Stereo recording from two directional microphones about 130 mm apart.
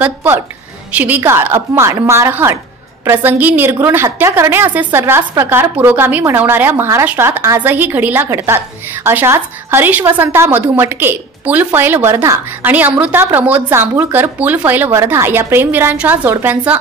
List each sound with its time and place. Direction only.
0.0 s a woman's voice: 15° right (ahead or behind)